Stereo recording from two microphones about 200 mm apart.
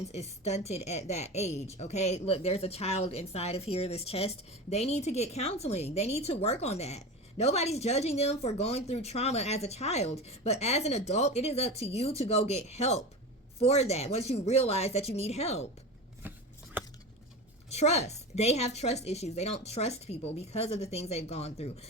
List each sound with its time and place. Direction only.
0.1 s a woman's voice: 35° left (ahead or behind)
16.2 s shuffling cards: 10° right (ahead or behind)
16.8 s a sound: 10° right (ahead or behind)
17.7 s a woman's voice: 35° left (ahead or behind)